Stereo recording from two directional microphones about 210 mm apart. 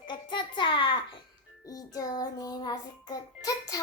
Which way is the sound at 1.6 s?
15° left (ahead or behind).